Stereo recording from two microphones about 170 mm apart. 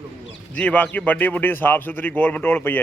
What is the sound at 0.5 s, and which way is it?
A man's voice, 10° left (ahead or behind).